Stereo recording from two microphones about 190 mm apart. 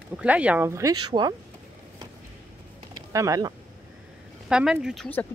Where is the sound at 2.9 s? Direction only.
15° right (ahead or behind).